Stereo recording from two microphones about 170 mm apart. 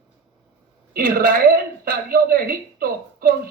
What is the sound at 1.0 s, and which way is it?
Speech, 60° right (ahead or behind).